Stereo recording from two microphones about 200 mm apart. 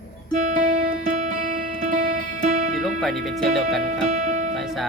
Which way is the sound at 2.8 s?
Centre (ahead or behind).